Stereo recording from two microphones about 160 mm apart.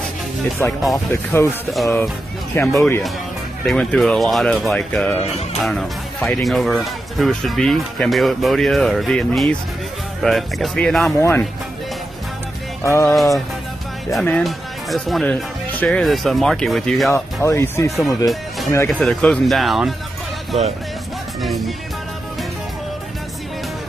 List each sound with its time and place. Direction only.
0.6 s speech: 15° left (ahead or behind)
2.6 s speech: centre (ahead or behind)
11.1 s speech: 15° left (ahead or behind)
12.8 s speech: 15° left (ahead or behind)
13.1 s speech: centre (ahead or behind)
17.1 s speech: 15° left (ahead or behind)
18.9 s speech: 5° left (ahead or behind)
21.4 s speech: centre (ahead or behind)